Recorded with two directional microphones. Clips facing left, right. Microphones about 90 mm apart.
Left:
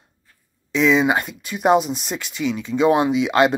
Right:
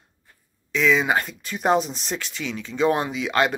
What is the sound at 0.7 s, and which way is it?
Speech, 20° left (ahead or behind).